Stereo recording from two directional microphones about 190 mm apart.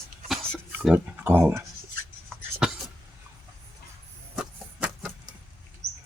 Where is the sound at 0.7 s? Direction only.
10° right (ahead or behind).